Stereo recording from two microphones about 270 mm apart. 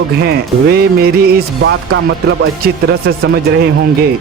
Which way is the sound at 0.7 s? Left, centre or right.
Right.